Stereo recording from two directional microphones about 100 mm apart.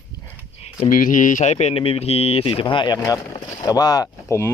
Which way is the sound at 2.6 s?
50° left (ahead or behind).